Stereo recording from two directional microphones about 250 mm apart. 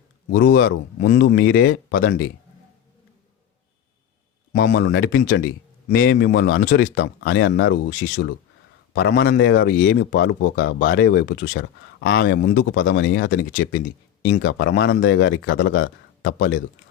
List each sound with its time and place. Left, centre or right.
0.3 s speech: left
0.9 s speech: left
4.5 s speech: left
9.7 s speech: left
10.8 s speech: left
13.5 s speech: left